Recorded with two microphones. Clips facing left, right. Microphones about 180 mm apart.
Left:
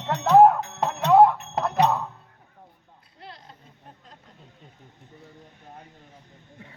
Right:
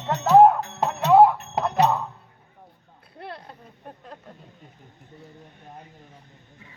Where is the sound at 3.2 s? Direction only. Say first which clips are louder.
Right 7 dB; 60° right (ahead or behind).